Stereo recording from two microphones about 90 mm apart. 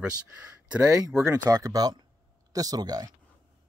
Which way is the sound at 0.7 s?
10° right (ahead or behind).